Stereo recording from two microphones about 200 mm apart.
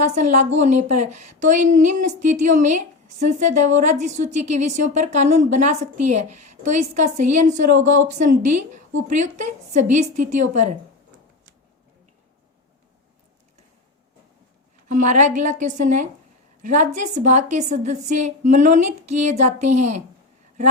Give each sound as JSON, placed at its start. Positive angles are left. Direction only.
{"t": 0.0, "sound": "a woman's voice", "side_deg": -35}
{"t": 14.8, "sound": "a woman's voice", "side_deg": -40}